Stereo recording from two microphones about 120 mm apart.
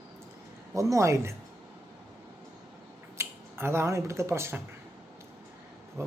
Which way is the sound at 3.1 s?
20° right (ahead or behind).